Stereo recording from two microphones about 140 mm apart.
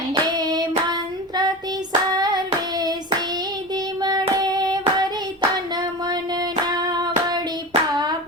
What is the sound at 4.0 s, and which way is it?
Child singing, 30° right (ahead or behind).